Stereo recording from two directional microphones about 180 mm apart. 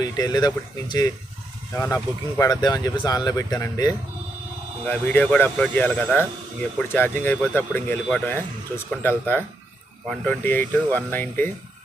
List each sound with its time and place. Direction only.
0.0 s speech: 20° left (ahead or behind)
4.9 s speech: 10° left (ahead or behind)